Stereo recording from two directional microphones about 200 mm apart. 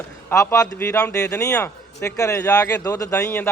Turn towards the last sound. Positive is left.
turn(degrees=15)  # may be behind; listen again after turning